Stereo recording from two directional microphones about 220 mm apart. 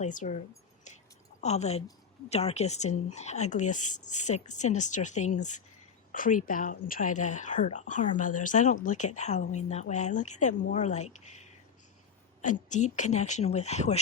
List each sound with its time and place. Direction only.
0.0 s speech: 35° left (ahead or behind)
1.4 s speech: 30° left (ahead or behind)
12.4 s speech: 35° left (ahead or behind)